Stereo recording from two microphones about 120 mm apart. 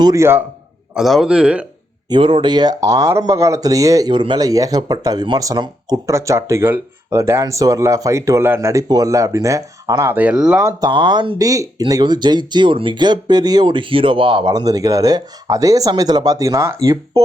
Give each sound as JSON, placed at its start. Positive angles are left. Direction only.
{"t": 0.0, "sound": "speech", "side_deg": -25}
{"t": 0.9, "sound": "a man's voice", "side_deg": 0}
{"t": 2.0, "sound": "speech", "side_deg": -45}
{"t": 6.1, "sound": "speech", "side_deg": -25}
{"t": 10.1, "sound": "a man's voice", "side_deg": -15}
{"t": 10.6, "sound": "speech", "side_deg": -20}
{"t": 10.8, "sound": "speech", "side_deg": -40}
{"t": 11.4, "sound": "speech", "side_deg": -30}